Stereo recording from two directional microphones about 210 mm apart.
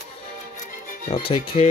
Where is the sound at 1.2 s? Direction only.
25° left (ahead or behind).